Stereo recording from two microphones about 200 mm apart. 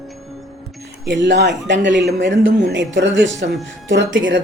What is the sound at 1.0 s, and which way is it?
Speech, 60° right (ahead or behind).